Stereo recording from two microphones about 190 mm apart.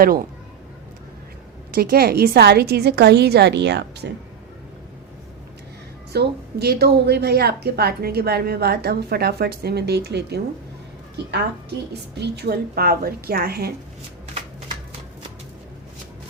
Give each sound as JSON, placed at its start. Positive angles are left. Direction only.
{"t": 0.0, "sound": "speech", "side_deg": -50}
{"t": 1.7, "sound": "a woman's voice", "side_deg": -55}
{"t": 6.1, "sound": "a woman's voice", "side_deg": -60}
{"t": 12.1, "sound": "a woman's voice", "side_deg": -60}